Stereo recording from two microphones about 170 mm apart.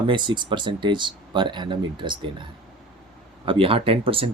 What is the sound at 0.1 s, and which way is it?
Speech, 30° right (ahead or behind).